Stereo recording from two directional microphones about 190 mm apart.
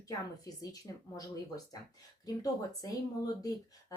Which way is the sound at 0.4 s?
20° left (ahead or behind).